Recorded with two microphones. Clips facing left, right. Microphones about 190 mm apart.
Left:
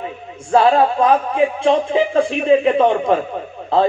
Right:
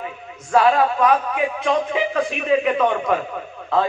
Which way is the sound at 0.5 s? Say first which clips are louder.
Left 3 dB; 30° left (ahead or behind).